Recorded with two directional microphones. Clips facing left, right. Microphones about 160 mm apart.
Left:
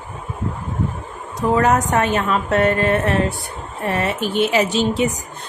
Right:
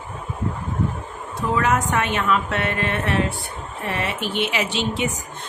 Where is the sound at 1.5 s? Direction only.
40° left (ahead or behind).